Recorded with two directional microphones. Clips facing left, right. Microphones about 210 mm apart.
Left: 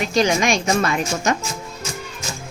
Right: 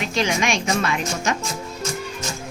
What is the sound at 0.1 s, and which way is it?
A woman's voice, 40° left (ahead or behind).